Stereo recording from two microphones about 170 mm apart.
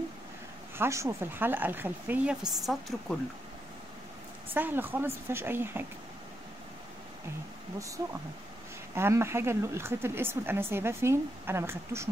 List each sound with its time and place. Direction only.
0.7 s speech: 15° right (ahead or behind); by 3.2 s centre (ahead or behind)
4.6 s speech: 10° right (ahead or behind)
8.0 s speech: 20° right (ahead or behind)